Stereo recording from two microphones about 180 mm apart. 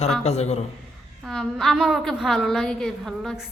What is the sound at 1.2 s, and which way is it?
A woman's voice, centre (ahead or behind).